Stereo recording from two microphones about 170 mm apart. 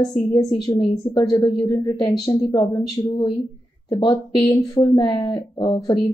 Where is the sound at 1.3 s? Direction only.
20° left (ahead or behind).